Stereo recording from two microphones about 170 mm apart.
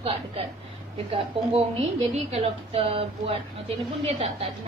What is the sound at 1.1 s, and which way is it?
A woman's voice, 35° right (ahead or behind).